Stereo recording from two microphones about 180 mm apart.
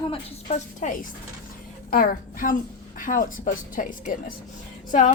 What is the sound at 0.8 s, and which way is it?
Speech, 40° left (ahead or behind).